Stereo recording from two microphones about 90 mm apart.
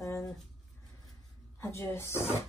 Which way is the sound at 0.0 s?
35° left (ahead or behind).